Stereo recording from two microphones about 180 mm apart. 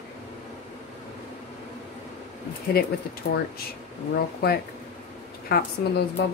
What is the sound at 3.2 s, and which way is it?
Speech, 70° left (ahead or behind).